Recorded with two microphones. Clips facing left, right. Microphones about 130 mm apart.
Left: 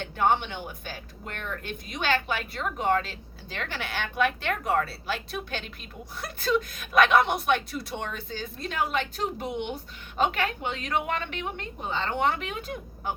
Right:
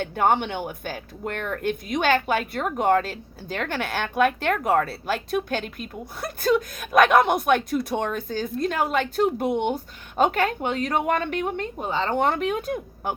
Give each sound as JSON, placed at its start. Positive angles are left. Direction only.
{"t": 0.0, "sound": "speech", "side_deg": -50}